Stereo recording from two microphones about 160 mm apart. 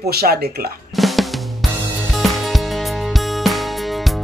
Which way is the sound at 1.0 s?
Centre (ahead or behind).